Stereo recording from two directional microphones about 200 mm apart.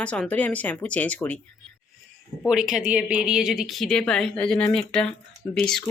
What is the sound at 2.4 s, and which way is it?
A woman's voice, centre (ahead or behind).